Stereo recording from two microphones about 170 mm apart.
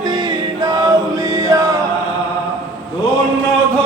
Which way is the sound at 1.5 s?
20° right (ahead or behind).